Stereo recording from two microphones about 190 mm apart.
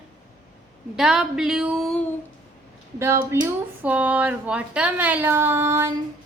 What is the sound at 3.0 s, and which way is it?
A woman's voice, 15° right (ahead or behind).